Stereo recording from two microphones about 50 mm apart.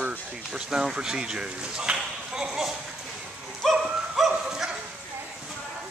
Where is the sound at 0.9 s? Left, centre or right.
Centre.